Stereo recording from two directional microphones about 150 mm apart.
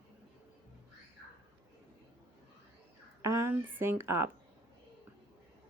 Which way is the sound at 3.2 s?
20° right (ahead or behind).